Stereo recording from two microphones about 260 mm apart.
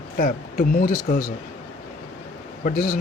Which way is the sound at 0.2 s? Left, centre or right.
Left.